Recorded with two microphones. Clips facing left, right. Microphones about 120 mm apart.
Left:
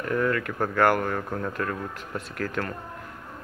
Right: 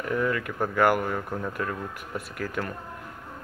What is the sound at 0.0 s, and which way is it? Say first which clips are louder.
Speech: left 1 dB; 10° right (ahead or behind).